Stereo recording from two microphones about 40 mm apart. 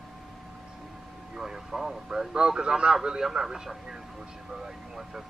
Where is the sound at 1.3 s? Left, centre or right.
Centre.